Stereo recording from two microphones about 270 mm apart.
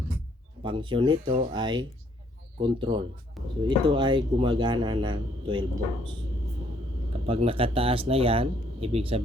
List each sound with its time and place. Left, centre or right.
0.6 s speech: centre
3.4 s speech: centre
3.7 s a man's voice: centre
7.3 s speech: right